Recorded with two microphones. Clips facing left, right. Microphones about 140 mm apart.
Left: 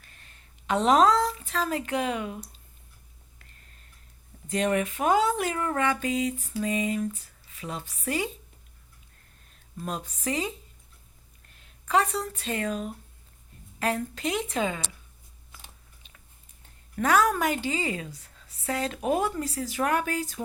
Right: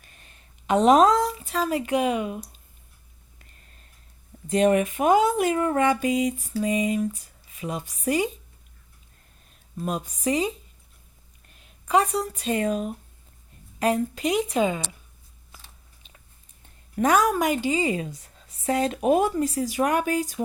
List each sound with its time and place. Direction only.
0.0 s speech: 20° right (ahead or behind)
4.4 s a woman's voice: 20° right (ahead or behind)
9.8 s a woman's voice: 10° right (ahead or behind)
11.6 s a woman's voice: 15° right (ahead or behind)
16.9 s a woman's voice: 20° right (ahead or behind)